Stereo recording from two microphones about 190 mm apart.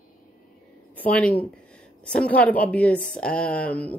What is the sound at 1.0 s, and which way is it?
Speech, 5° left (ahead or behind).